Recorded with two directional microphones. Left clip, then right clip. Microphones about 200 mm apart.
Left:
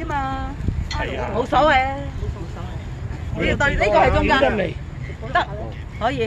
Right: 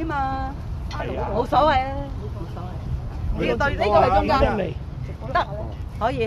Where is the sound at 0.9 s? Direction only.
50° left (ahead or behind).